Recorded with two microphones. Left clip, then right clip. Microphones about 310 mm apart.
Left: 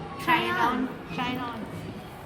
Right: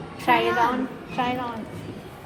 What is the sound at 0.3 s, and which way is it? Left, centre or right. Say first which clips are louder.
A woman's voice: right 4 dB; centre.